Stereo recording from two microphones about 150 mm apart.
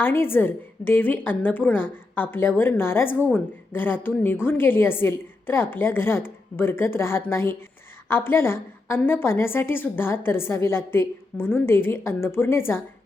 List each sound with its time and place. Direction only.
0.0 s a woman's voice: 15° left (ahead or behind)